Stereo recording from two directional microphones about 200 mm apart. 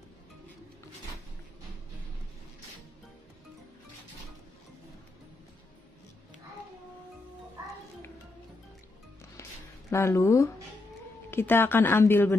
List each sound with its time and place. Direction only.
9.2 s music: 15° left (ahead or behind)
11.2 s a woman's voice: 10° left (ahead or behind)